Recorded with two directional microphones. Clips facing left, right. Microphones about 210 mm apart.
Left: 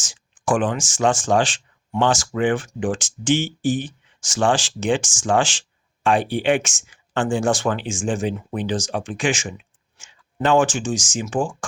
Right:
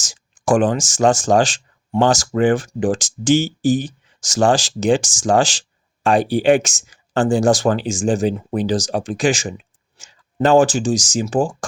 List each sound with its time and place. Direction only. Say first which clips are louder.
0.0 s speech: right 3 dB; 40° right (ahead or behind)